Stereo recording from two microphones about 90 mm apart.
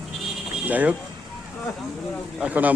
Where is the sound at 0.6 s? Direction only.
15° right (ahead or behind).